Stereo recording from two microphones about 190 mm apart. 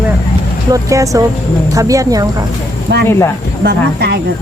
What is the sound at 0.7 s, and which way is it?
Speech, 15° right (ahead or behind).